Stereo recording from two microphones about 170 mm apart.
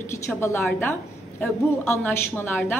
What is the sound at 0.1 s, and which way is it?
A woman's voice, 15° left (ahead or behind).